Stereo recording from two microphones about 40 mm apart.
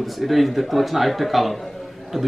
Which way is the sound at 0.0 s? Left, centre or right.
Centre.